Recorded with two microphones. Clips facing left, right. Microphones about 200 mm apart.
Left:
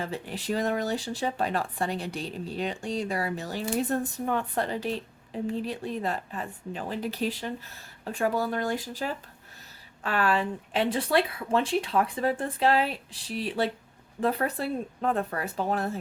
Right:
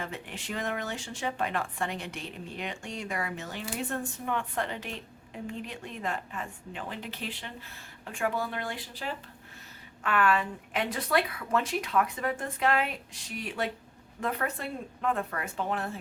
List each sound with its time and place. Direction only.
0.0 s speech: 35° left (ahead or behind)
10.0 s speech: 30° left (ahead or behind)